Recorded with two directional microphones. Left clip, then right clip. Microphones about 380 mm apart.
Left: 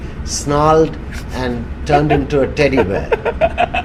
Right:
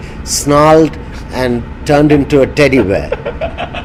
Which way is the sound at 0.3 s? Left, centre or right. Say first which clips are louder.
Right 6 dB; right.